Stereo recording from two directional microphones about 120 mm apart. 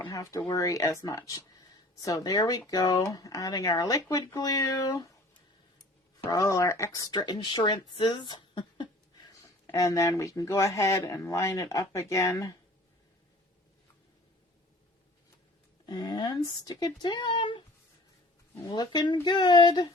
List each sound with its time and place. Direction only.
0.1 s speech: 25° left (ahead or behind)
6.2 s speech: 25° left (ahead or behind)
15.9 s speech: 35° left (ahead or behind)
18.7 s speech: 35° left (ahead or behind)